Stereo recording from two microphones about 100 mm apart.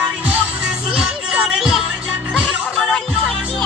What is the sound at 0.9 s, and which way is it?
Music, 5° right (ahead or behind).